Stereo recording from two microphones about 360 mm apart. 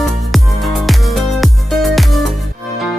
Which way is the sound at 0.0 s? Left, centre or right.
Centre.